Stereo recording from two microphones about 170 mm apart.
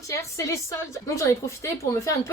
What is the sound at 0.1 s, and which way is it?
A woman's voice, 15° left (ahead or behind).